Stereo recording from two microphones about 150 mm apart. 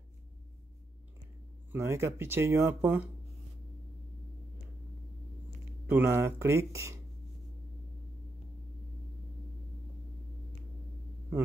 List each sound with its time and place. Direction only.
1.7 s speech: 15° right (ahead or behind)
5.9 s speech: 15° right (ahead or behind)